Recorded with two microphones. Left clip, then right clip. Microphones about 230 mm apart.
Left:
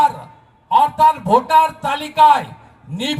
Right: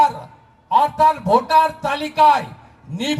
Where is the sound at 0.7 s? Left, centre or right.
Left.